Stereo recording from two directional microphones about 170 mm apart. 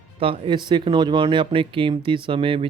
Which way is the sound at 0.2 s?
30° right (ahead or behind).